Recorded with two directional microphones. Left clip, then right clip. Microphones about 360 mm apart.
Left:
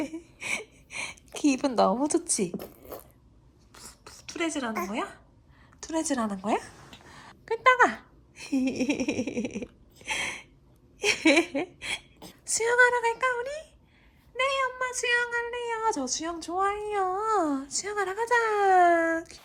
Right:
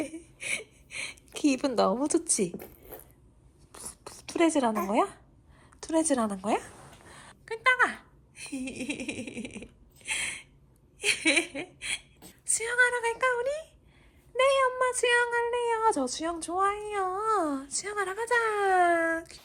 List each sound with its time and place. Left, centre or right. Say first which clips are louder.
0.3 s gasp: left 1 dB; centre
2.5 s zipper: left 4 dB; left
3.7 s a sound: right 2 dB; centre
5.8 s speech: right 2 dB; centre
7.1 s a sound: left 6 dB; centre
11.0 s a woman's voice: left 3 dB; centre